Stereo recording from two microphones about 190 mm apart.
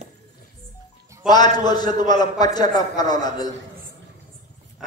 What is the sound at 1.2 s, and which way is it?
A man's voice, 20° left (ahead or behind).